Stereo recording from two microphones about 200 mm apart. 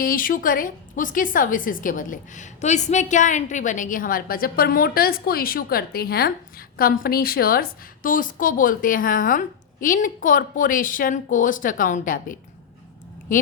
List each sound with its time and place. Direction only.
0.0 s a woman's voice: 45° left (ahead or behind)